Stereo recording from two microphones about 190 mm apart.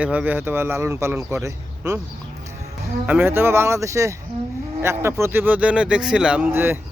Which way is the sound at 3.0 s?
10° right (ahead or behind).